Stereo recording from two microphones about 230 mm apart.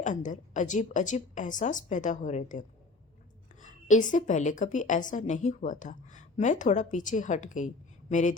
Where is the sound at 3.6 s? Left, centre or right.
Left.